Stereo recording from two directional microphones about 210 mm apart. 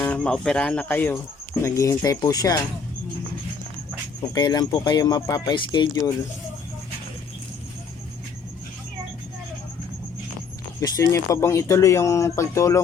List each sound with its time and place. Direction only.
0.0 s speech: 5° left (ahead or behind)
4.4 s speech: 20° left (ahead or behind)
10.8 s speech: 15° left (ahead or behind)